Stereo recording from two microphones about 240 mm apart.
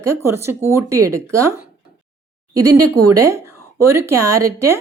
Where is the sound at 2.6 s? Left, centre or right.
Right.